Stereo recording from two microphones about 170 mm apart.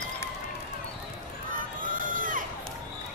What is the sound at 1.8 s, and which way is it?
Crowd, 50° right (ahead or behind).